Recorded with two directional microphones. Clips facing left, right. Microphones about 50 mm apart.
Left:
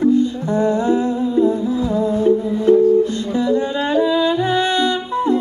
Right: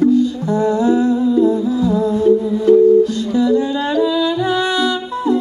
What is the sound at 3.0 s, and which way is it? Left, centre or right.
Music, left.